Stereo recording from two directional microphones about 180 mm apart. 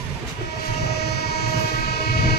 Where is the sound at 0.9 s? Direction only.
65° left (ahead or behind).